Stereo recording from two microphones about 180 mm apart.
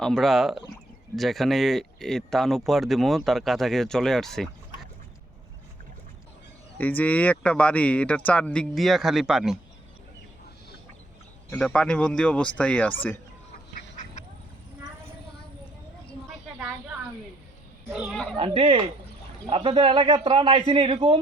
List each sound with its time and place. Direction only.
0.0 s speech: centre (ahead or behind)
6.7 s speech: 10° left (ahead or behind)
11.5 s speech: 5° left (ahead or behind)
13.9 s quack: 45° left (ahead or behind)
17.9 s speech: centre (ahead or behind)
18.3 s a man's voice: 30° right (ahead or behind)